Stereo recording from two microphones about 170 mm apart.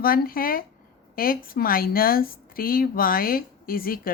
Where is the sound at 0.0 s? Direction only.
60° left (ahead or behind).